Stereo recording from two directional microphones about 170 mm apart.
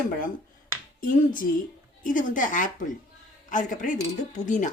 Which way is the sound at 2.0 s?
50° left (ahead or behind).